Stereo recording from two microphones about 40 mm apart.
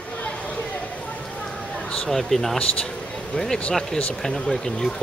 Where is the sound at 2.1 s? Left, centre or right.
Centre.